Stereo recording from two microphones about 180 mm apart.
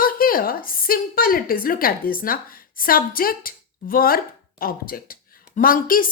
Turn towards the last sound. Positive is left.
turn(degrees=50)  # may be behind; listen again after turning